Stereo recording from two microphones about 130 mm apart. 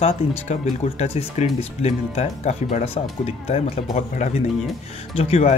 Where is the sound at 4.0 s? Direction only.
60° left (ahead or behind).